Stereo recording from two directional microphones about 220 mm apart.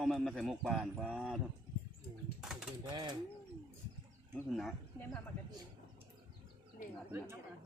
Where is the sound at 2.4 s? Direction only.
Centre (ahead or behind).